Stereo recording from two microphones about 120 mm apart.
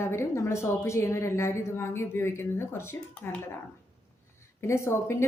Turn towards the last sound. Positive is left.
turn(degrees=20)  # may be behind; listen again after turning